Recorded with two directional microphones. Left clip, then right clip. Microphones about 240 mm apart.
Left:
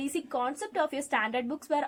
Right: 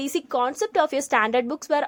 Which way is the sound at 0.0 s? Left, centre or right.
Right.